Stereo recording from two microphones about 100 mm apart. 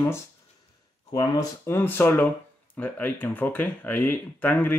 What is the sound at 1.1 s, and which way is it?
Speech, 45° left (ahead or behind).